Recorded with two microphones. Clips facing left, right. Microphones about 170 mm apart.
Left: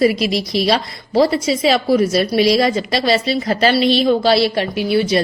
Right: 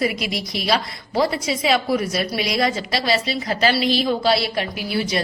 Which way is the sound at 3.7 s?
25° left (ahead or behind).